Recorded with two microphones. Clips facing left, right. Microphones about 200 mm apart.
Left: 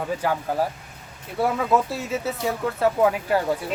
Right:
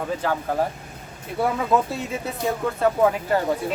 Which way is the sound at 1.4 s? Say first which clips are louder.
Even; centre (ahead or behind).